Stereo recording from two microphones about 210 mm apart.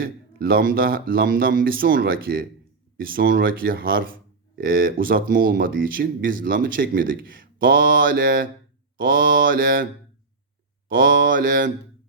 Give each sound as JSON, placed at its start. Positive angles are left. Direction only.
{"t": 0.0, "sound": "speech", "side_deg": -45}
{"t": 10.8, "sound": "mantra", "side_deg": -40}